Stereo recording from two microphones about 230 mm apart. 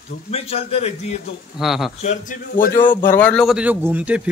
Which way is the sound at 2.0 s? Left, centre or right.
Left.